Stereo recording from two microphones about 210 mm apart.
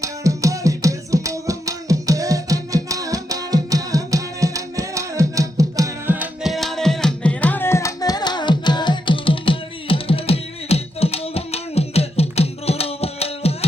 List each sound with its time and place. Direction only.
0.0 s music: 15° right (ahead or behind); by 13.7 s 30° left (ahead or behind)